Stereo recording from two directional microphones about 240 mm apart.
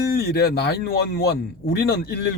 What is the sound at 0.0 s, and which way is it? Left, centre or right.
A man's voice, left.